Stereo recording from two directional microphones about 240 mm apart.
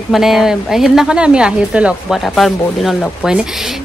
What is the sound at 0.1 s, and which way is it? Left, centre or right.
A woman's voice, centre.